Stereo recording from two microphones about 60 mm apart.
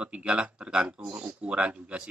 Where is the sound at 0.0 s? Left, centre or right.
Centre.